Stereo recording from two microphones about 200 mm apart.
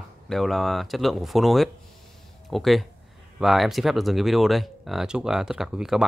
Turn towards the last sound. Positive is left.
turn(degrees=0)  # may be behind; listen again after turning